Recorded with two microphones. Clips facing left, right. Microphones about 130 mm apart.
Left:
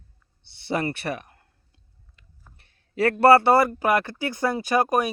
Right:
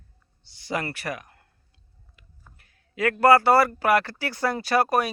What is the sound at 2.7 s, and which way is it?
Speech, 30° left (ahead or behind).